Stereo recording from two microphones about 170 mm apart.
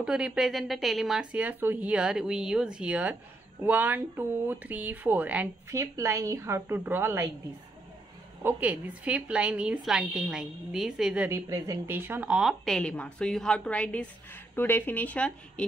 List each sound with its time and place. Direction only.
0.0 s a woman's voice: 5° right (ahead or behind)
8.4 s a woman's voice: 10° right (ahead or behind)
11.2 s a woman's voice: 15° right (ahead or behind); by 15.6 s 5° left (ahead or behind)